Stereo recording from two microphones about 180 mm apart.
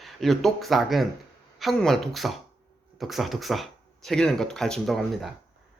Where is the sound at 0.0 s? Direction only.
Centre (ahead or behind).